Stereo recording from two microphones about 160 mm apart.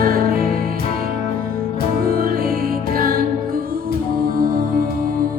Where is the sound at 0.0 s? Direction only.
65° right (ahead or behind).